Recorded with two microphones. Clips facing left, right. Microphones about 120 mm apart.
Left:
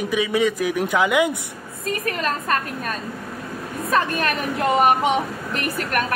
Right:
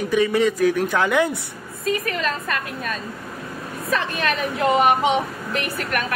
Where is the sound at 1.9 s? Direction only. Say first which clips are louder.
Right 1 dB; 45° left (ahead or behind).